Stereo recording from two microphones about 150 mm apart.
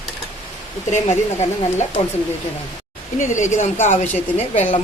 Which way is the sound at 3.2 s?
55° left (ahead or behind).